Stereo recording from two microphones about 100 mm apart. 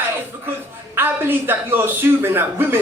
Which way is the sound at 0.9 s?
20° right (ahead or behind).